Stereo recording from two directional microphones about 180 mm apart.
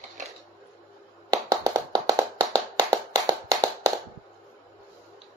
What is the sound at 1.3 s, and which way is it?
Clapping, 20° right (ahead or behind).